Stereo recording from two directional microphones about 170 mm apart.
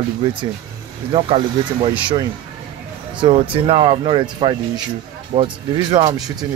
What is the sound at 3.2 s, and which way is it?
Speech, 30° right (ahead or behind).